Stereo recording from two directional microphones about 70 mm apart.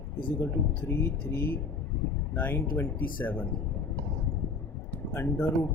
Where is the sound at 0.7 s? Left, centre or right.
Left.